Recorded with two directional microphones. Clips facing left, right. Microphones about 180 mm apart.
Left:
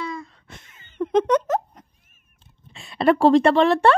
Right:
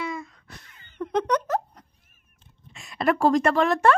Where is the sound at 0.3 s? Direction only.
25° left (ahead or behind).